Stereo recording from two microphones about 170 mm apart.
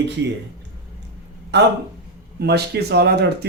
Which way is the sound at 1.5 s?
90° right.